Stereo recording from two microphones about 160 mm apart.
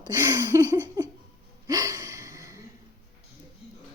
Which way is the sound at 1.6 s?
20° right (ahead or behind).